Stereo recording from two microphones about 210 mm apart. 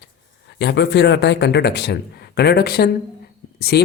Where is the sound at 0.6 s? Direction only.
55° left (ahead or behind).